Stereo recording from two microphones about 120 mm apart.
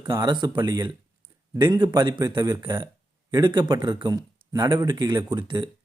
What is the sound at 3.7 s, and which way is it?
Speech, 35° right (ahead or behind).